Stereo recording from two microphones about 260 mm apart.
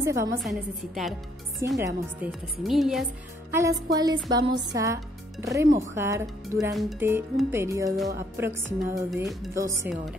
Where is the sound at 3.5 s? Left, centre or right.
Centre.